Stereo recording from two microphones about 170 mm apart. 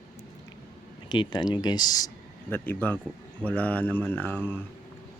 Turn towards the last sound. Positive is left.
turn(degrees=10)  # may be behind; listen again after turning